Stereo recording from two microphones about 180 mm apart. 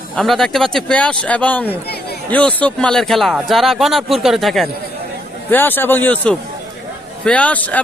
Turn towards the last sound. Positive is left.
turn(degrees=10)  # may be behind; listen again after turning